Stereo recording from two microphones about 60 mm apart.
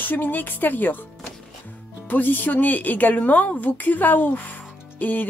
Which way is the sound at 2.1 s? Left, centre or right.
Left.